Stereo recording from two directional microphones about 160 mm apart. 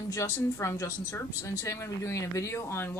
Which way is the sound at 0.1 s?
20° left (ahead or behind).